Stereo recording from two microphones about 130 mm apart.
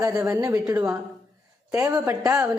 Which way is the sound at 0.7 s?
10° right (ahead or behind).